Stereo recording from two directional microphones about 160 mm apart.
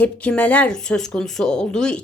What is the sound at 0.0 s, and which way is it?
A woman's voice, 10° left (ahead or behind).